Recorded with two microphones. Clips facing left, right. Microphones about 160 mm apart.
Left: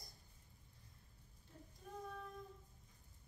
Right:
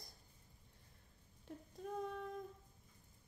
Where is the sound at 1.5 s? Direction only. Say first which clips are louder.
Right 8 dB; 90° right.